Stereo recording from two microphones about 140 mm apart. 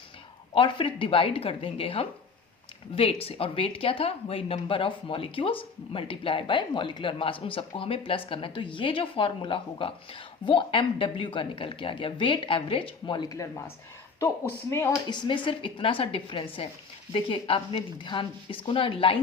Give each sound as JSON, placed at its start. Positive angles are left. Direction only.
{"t": 0.5, "sound": "speech", "side_deg": 40}
{"t": 15.1, "sound": "speech", "side_deg": 30}